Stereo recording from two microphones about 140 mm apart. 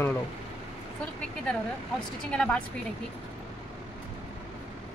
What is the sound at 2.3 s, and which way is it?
Speech, 5° left (ahead or behind).